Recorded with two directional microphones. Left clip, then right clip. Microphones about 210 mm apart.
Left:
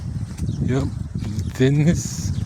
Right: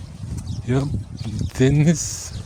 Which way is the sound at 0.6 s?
5° right (ahead or behind).